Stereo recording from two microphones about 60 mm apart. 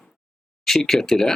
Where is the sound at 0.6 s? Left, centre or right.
Centre.